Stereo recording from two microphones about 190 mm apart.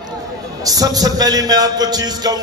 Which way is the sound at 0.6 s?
20° right (ahead or behind).